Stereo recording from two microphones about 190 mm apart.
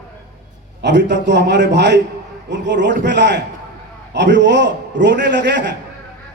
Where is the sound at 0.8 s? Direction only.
65° right (ahead or behind).